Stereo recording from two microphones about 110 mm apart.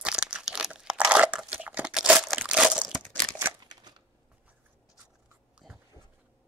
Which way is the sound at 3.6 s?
40° right (ahead or behind).